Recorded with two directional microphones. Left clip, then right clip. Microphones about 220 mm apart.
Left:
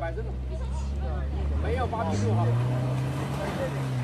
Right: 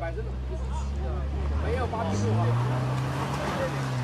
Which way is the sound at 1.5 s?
Centre (ahead or behind).